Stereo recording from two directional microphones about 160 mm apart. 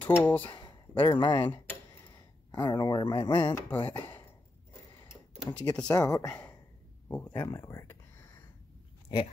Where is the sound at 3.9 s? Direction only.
25° left (ahead or behind).